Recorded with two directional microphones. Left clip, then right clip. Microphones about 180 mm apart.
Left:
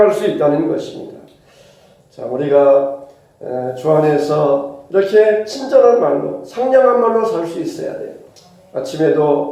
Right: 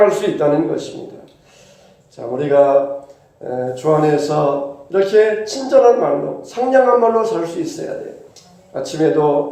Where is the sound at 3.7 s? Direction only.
35° right (ahead or behind).